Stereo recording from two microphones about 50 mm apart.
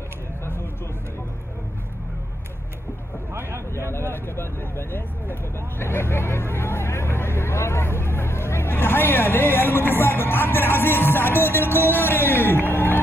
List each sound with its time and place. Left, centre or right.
3.9 s speech: left